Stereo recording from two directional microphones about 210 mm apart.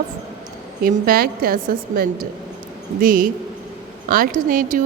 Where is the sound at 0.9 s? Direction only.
45° right (ahead or behind).